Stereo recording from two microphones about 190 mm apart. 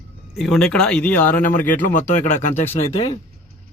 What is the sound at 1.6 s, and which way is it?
Speech, 40° left (ahead or behind).